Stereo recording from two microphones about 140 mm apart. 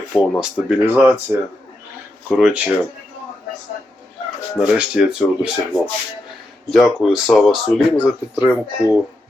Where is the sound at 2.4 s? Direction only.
5° right (ahead or behind).